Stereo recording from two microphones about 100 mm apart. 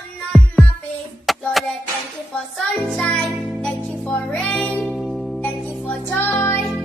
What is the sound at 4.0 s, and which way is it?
Music, 15° left (ahead or behind).